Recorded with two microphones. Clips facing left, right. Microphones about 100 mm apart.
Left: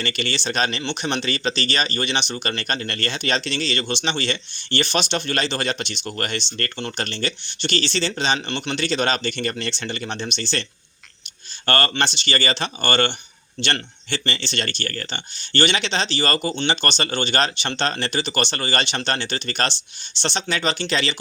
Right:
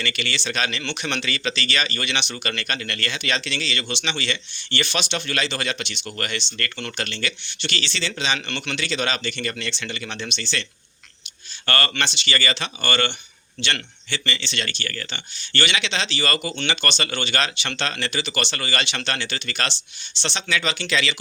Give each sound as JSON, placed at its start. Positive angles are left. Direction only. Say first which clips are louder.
{"t": 0.0, "sound": "speech", "louder": "left 2 dB", "side_deg": 40}